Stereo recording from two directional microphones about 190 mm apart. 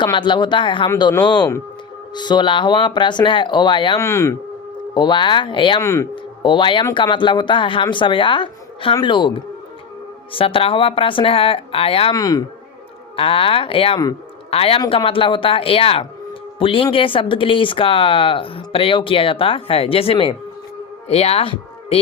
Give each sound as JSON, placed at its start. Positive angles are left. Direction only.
{"t": 0.0, "sound": "speech", "side_deg": 25}
{"t": 10.3, "sound": "speech", "side_deg": 30}
{"t": 12.1, "sound": "speech", "side_deg": 20}
{"t": 13.1, "sound": "speech", "side_deg": 30}